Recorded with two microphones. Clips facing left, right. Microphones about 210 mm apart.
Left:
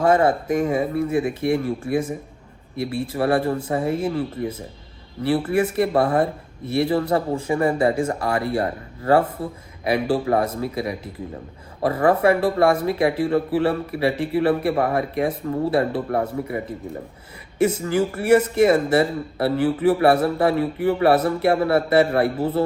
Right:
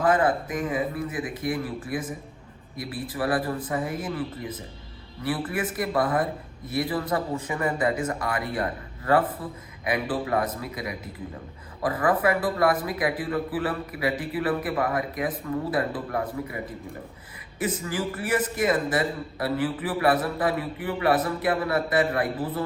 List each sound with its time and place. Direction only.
0.0 s speech: 25° left (ahead or behind)
17.6 s speech: 25° left (ahead or behind)